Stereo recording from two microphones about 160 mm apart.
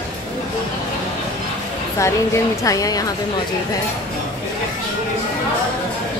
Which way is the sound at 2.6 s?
20° left (ahead or behind).